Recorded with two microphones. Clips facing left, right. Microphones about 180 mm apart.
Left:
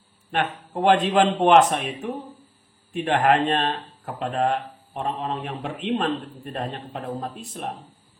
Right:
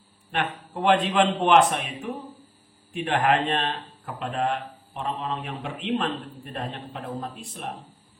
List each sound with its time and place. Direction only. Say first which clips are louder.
0.3 s speech: left 3 dB; 40° left (ahead or behind)